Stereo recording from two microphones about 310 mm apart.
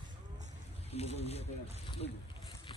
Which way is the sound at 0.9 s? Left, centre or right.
Centre.